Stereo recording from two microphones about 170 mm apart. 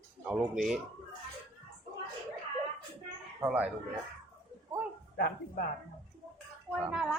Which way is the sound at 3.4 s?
10° right (ahead or behind).